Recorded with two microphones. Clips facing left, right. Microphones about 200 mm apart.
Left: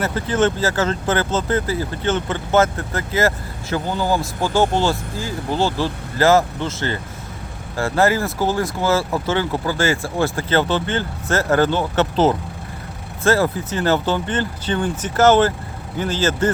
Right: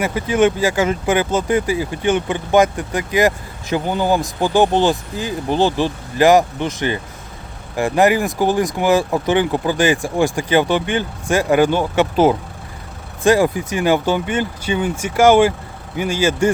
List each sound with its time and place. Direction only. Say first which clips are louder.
0.0 s speech: right 3 dB; 10° right (ahead or behind)